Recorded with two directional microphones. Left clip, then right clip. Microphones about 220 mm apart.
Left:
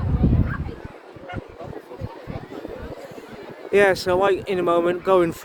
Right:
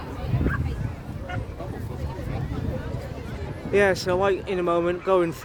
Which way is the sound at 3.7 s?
20° left (ahead or behind).